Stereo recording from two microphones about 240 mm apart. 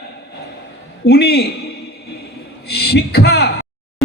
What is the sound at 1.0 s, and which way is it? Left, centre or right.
Speech, left.